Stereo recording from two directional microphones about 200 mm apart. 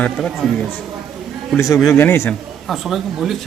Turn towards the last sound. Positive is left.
turn(degrees=0)  # may be behind; listen again after turning